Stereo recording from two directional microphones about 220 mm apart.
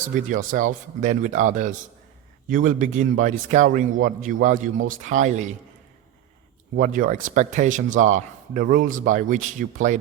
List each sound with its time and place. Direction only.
0.0 s a man's voice: 35° right (ahead or behind)
6.7 s a man's voice: 40° right (ahead or behind)